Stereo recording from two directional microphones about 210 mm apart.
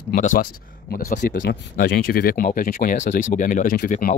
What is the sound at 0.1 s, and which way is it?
Speech, 40° left (ahead or behind).